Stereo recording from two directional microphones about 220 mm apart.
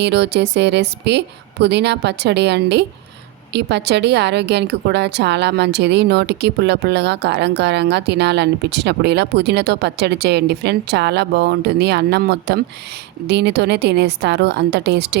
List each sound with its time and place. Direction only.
0.0 s a woman's voice: 50° right (ahead or behind)